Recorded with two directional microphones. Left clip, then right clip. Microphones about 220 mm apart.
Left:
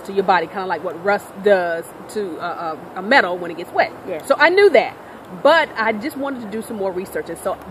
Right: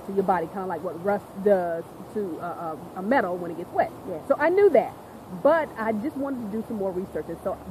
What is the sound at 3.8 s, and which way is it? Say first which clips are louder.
Speech: left 7 dB; 10° left (ahead or behind).